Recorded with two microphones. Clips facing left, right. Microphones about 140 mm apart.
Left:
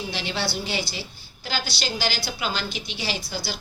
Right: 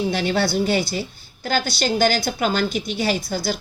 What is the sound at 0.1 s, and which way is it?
A woman's voice, 50° right (ahead or behind).